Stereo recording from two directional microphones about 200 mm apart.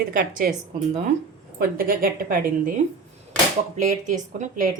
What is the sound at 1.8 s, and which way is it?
Speech, 45° right (ahead or behind).